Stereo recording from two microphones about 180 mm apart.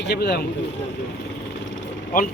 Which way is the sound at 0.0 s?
65° left (ahead or behind).